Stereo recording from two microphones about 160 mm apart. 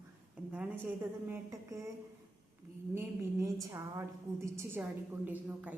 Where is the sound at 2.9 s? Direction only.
15° right (ahead or behind).